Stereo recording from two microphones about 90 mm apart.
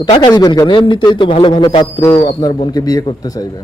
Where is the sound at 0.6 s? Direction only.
65° left (ahead or behind); by 3.6 s 45° left (ahead or behind).